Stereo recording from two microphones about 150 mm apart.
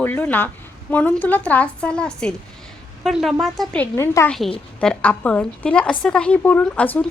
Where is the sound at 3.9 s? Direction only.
20° left (ahead or behind).